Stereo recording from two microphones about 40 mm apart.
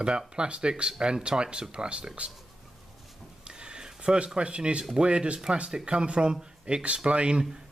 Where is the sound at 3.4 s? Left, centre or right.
Right.